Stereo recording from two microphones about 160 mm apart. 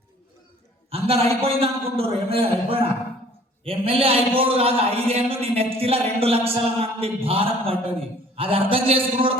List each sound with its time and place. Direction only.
0.9 s a man's voice: 40° right (ahead or behind)